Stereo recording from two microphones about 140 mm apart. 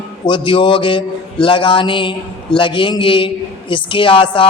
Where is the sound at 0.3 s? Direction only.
35° left (ahead or behind).